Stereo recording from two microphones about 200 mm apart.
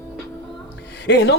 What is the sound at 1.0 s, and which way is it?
Speech, 70° left (ahead or behind).